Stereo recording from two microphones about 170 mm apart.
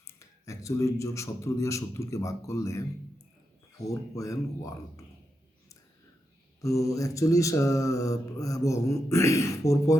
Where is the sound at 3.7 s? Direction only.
20° left (ahead or behind).